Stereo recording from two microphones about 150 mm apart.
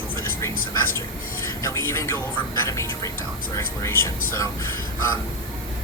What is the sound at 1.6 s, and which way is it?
Speech, 20° left (ahead or behind).